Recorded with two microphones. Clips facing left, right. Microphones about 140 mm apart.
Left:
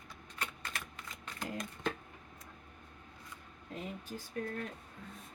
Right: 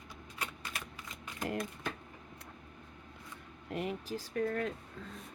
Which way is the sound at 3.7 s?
75° right (ahead or behind).